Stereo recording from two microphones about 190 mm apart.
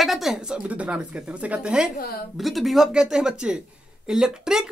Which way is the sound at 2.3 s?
Centre (ahead or behind).